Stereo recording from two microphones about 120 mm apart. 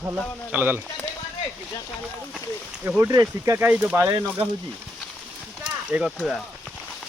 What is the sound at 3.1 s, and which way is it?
Speech, 30° right (ahead or behind).